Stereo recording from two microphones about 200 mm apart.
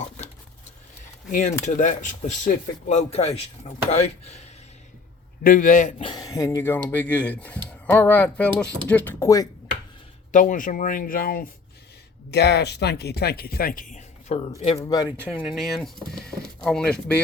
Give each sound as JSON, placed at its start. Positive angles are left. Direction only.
{"t": 1.3, "sound": "speech", "side_deg": 40}
{"t": 5.4, "sound": "speech", "side_deg": 45}
{"t": 6.0, "sound": "speech", "side_deg": 20}
{"t": 10.3, "sound": "speech", "side_deg": 40}
{"t": 14.6, "sound": "speech", "side_deg": 30}
{"t": 15.4, "sound": "speech", "side_deg": 0}